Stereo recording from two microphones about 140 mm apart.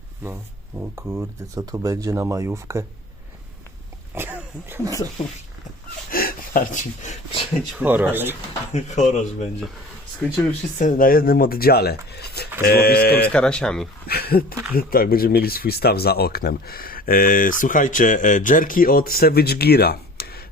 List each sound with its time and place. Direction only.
0.8 s speech: 20° right (ahead or behind)
4.1 s speech: 15° right (ahead or behind)
4.9 s speech: 25° left (ahead or behind)
6.1 s a sound: 90° left; by 7.2 s 60° left (ahead or behind)
7.8 s speech: 10° right (ahead or behind)
8.7 s speech: 60° left (ahead or behind)
10.8 s speech: 70° left (ahead or behind); by 13.3 s 90° left
13.3 s speech: 5° left (ahead or behind)
14.1 s speech: 90° left